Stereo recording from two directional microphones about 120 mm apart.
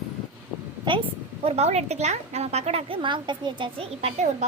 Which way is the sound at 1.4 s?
60° right (ahead or behind).